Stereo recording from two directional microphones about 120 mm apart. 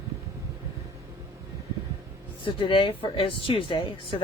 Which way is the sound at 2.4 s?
45° left (ahead or behind).